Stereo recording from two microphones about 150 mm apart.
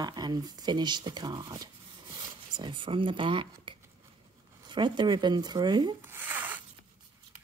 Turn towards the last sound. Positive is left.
turn(degrees=-10)  # may be behind; listen again after turning